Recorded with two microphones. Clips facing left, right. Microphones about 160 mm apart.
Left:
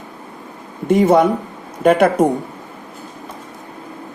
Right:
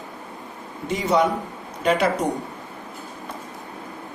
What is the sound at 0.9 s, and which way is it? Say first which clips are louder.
Speech: left 8 dB; 55° left (ahead or behind).